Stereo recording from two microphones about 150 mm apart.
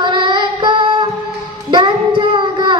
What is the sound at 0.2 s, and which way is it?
Child singing, 30° right (ahead or behind).